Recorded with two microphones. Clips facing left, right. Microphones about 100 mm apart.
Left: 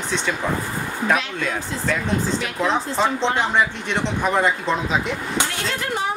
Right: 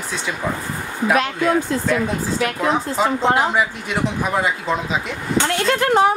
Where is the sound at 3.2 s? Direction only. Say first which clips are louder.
Right 4 dB; 45° right (ahead or behind).